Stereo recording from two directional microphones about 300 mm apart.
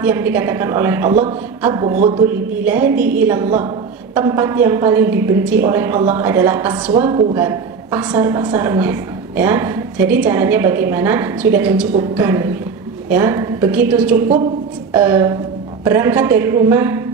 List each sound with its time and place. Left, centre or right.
0.0 s a woman's voice: centre
14.1 s a woman's voice: right
14.9 s a woman's voice: centre